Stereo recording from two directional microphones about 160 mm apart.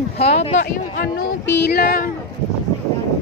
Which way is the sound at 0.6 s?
65° left (ahead or behind).